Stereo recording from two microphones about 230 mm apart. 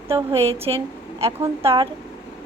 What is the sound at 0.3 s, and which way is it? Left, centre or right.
Speech, right.